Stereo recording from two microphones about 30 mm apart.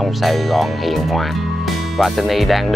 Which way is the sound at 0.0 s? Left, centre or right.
Centre.